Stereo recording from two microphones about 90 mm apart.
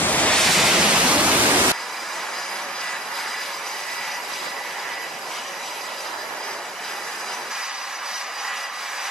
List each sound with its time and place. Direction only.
0.0 s waves: 15° left (ahead or behind)
0.4 s pink noise: centre (ahead or behind); by 1.8 s 20° right (ahead or behind)